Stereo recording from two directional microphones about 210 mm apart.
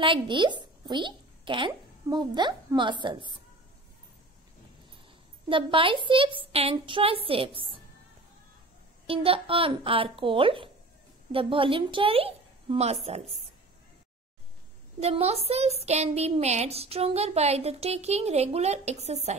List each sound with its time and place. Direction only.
0.0 s a child's voice: 25° right (ahead or behind)
5.5 s speech: 25° right (ahead or behind)
9.0 s speech: 25° right (ahead or behind)
15.0 s speech: 30° right (ahead or behind)